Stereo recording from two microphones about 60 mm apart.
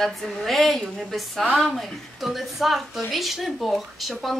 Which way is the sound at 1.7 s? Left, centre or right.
Centre.